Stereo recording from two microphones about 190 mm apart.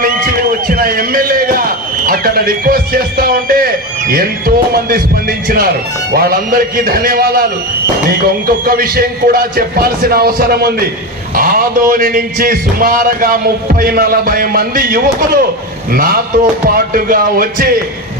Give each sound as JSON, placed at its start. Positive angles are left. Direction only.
{"t": 0.0, "sound": "a sound", "side_deg": -50}
{"t": 2.0, "sound": "a man's voice", "side_deg": -50}
{"t": 8.4, "sound": "a man's voice", "side_deg": -50}